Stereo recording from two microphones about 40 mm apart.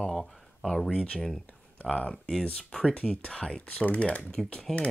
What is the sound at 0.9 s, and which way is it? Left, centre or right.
Speech, left.